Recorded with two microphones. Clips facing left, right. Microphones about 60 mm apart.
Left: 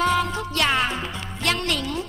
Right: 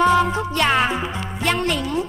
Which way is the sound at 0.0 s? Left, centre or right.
Centre.